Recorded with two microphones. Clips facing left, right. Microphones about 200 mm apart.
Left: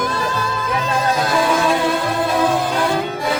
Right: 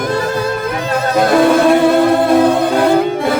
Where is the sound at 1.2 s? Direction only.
60° right (ahead or behind).